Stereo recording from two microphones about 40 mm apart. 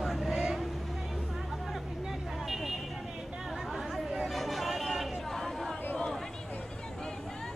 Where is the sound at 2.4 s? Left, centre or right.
Centre.